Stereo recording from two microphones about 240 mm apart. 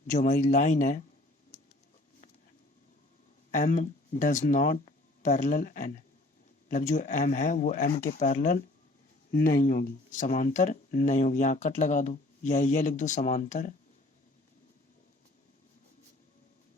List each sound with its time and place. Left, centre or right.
0.1 s speech: left
3.5 s speech: left